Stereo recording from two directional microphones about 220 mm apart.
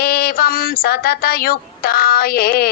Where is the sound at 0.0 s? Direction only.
40° left (ahead or behind).